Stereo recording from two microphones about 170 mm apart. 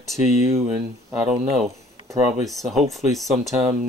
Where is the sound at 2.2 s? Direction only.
Centre (ahead or behind).